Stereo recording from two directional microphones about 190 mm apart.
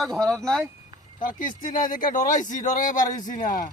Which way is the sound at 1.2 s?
45° left (ahead or behind).